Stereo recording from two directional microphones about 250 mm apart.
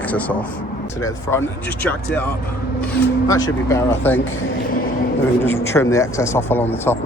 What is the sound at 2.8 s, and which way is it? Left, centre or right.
A man's voice, centre.